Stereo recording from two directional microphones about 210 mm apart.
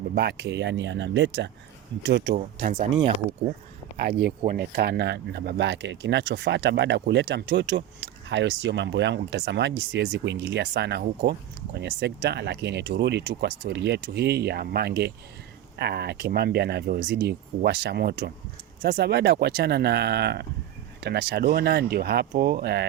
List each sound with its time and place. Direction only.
0.1 s speech: 50° right (ahead or behind)
2.3 s speech: 40° right (ahead or behind)
4.0 s speech: 50° right (ahead or behind)